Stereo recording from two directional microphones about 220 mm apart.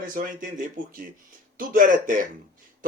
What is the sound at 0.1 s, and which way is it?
A man's voice, 40° right (ahead or behind).